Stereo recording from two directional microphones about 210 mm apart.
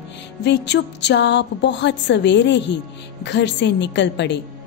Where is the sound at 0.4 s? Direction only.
55° left (ahead or behind).